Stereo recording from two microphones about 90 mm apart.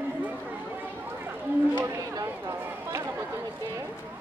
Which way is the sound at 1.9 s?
35° right (ahead or behind).